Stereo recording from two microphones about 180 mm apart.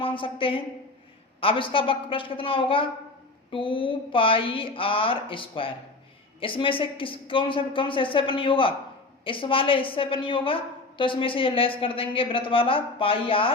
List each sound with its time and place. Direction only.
0.0 s a woman's voice: 30° left (ahead or behind)